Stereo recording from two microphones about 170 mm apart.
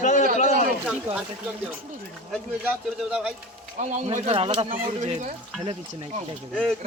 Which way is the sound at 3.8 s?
45° right (ahead or behind).